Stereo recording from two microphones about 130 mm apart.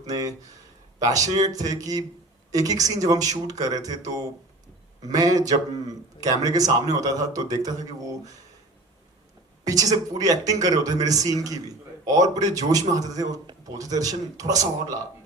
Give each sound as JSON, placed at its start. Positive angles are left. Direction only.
{"t": 0.0, "sound": "a man's voice", "side_deg": -30}
{"t": 9.6, "sound": "a man's voice", "side_deg": -30}